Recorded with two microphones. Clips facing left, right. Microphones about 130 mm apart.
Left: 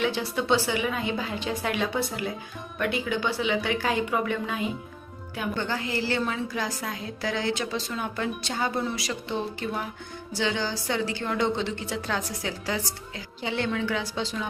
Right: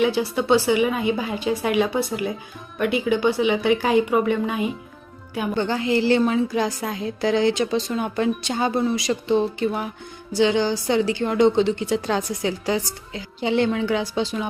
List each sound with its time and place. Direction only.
0.0 s a woman's voice: 10° right (ahead or behind)